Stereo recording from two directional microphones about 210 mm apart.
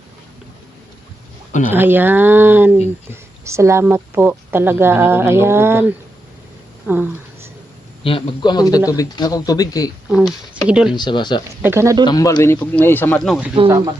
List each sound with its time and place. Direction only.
1.7 s a woman's voice: 10° right (ahead or behind)
6.8 s a sound: 10° right (ahead or behind)
8.0 s a man's voice: 25° left (ahead or behind)
10.1 s speech: 5° right (ahead or behind)
10.9 s a man's voice: 20° left (ahead or behind)
11.6 s a woman's voice: 10° right (ahead or behind)
12.0 s speech: 20° left (ahead or behind); by 13.5 s centre (ahead or behind)
13.7 s a woman's voice: 15° right (ahead or behind)